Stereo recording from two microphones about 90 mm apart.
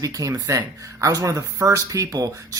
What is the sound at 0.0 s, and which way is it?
Speech, 40° right (ahead or behind).